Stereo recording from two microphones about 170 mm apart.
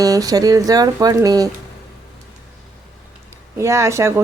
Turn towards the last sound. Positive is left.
turn(degrees=-15)  # may be behind; listen again after turning